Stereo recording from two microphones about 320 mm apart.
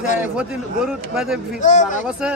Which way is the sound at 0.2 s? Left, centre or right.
Centre.